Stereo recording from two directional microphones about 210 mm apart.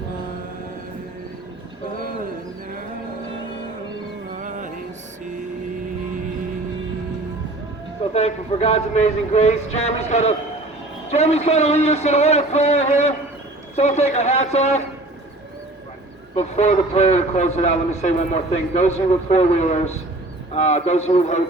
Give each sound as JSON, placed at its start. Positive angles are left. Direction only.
{"t": 4.3, "sound": "music", "side_deg": -35}
{"t": 8.1, "sound": "a man's voice", "side_deg": 30}
{"t": 16.3, "sound": "a man's voice", "side_deg": 30}